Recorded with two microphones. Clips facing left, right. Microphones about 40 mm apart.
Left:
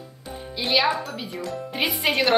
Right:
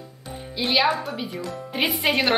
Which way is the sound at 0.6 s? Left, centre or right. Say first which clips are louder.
Right 1 dB; centre.